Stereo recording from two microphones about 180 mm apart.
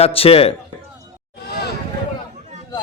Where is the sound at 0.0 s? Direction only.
30° left (ahead or behind).